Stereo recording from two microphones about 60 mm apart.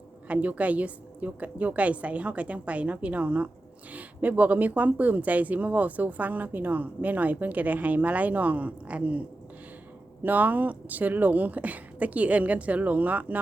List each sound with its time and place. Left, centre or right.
0.3 s speech: right
10.2 s speech: right